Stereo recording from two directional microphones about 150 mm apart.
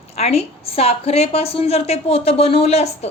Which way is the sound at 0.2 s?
45° left (ahead or behind).